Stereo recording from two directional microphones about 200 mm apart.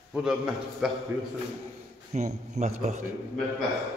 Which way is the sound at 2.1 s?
35° right (ahead or behind).